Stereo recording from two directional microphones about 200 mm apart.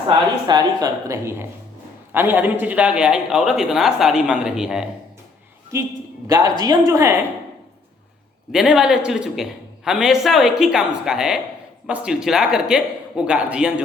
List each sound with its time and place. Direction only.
0.4 s a woman's voice: 20° right (ahead or behind); by 4.9 s 5° right (ahead or behind)
6.2 s a woman's voice: 20° right (ahead or behind)
8.5 s a man's voice: 5° right (ahead or behind)